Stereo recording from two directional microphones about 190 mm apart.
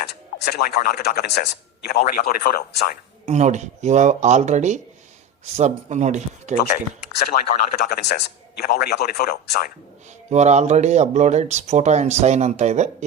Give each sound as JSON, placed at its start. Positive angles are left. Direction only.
{"t": 0.0, "sound": "speech", "side_deg": 55}
{"t": 3.2, "sound": "speech", "side_deg": -40}
{"t": 7.3, "sound": "speech", "side_deg": 55}
{"t": 10.2, "sound": "speech", "side_deg": -35}